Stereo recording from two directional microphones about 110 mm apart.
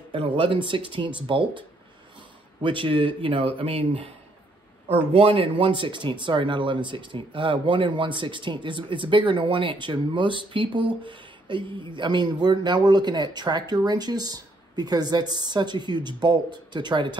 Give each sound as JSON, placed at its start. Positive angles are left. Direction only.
{"t": 0.1, "sound": "speech", "side_deg": -55}
{"t": 2.6, "sound": "speech", "side_deg": -50}